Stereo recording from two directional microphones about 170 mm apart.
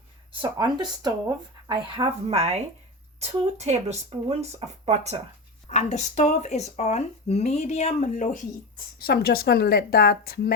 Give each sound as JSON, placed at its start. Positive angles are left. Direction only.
{"t": 0.6, "sound": "speech", "side_deg": -25}
{"t": 5.6, "sound": "speech", "side_deg": 40}
{"t": 9.0, "sound": "a woman's voice", "side_deg": 65}